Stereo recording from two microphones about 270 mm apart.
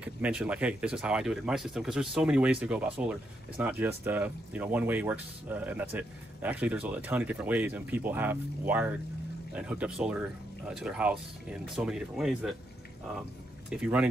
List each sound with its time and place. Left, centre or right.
0.0 s speech: centre
13.7 s speech: centre